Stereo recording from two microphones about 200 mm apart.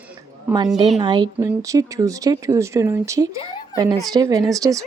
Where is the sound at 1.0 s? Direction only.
25° right (ahead or behind).